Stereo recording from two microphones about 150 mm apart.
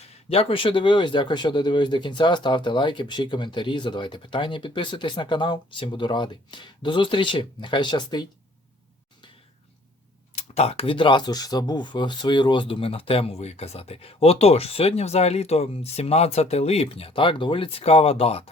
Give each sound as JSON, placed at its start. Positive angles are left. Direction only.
{"t": 0.0, "sound": "speech", "side_deg": 40}
{"t": 10.3, "sound": "speech", "side_deg": 45}